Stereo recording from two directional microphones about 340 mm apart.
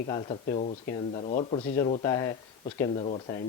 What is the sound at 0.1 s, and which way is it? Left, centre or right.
Speech, centre.